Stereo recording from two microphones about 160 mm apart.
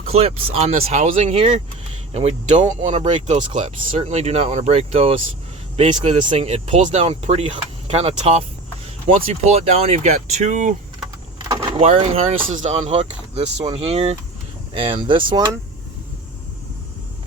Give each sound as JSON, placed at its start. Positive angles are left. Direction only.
{"t": 0.0, "sound": "speech", "side_deg": -40}
{"t": 11.8, "sound": "speech", "side_deg": -35}